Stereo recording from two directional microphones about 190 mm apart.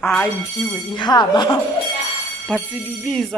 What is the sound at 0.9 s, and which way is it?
Speech, 25° left (ahead or behind).